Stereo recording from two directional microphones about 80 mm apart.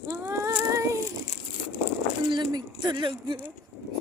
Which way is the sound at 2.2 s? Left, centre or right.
Right.